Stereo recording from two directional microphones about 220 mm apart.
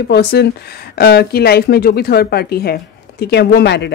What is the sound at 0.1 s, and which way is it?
A woman's voice, 45° left (ahead or behind).